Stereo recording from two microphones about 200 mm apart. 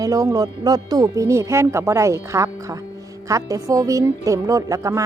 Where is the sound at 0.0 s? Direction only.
15° right (ahead or behind).